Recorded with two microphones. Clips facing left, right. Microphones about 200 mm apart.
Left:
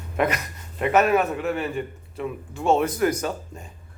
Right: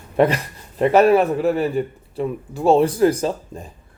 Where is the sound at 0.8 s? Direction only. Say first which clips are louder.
Right 6 dB; 35° right (ahead or behind).